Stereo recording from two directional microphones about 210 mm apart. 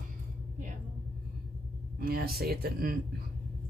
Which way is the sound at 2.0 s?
45° right (ahead or behind).